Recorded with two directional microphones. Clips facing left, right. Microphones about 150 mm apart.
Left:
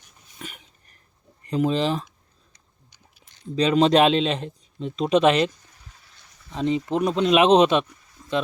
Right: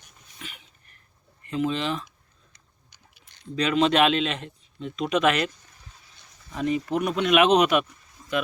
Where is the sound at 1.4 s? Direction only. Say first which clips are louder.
Left 4 dB; 35° left (ahead or behind).